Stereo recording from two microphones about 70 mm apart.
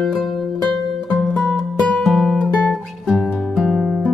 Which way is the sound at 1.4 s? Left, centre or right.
Centre.